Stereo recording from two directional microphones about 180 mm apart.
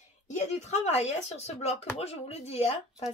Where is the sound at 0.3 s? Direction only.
40° left (ahead or behind).